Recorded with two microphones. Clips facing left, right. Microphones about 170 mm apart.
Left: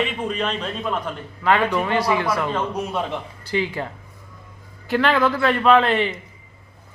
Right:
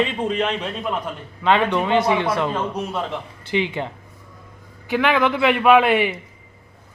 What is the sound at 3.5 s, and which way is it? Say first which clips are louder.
A man's voice: right 1 dB; 20° right (ahead or behind).